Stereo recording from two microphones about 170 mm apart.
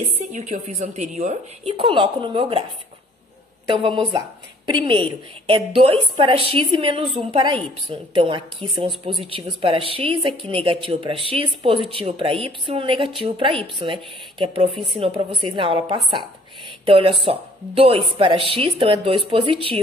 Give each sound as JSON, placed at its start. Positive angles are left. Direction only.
{"t": 0.3, "sound": "a woman's voice", "side_deg": -45}
{"t": 1.7, "sound": "speech", "side_deg": -30}
{"t": 3.6, "sound": "a woman's voice", "side_deg": -30}